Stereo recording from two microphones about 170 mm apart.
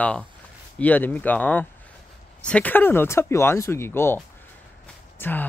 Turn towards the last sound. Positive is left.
turn(degrees=10)  # may be behind; listen again after turning